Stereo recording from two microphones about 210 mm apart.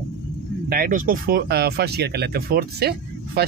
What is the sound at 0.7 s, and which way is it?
Speech, 45° right (ahead or behind).